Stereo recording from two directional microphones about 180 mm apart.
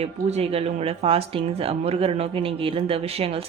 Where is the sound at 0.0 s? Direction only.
35° right (ahead or behind).